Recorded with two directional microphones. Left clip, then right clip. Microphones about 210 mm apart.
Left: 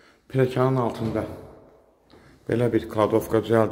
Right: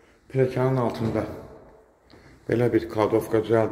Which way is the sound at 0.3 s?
25° left (ahead or behind).